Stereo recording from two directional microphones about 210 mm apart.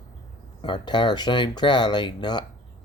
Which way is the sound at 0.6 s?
20° left (ahead or behind).